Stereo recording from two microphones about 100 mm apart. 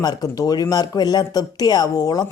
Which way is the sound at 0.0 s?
40° left (ahead or behind).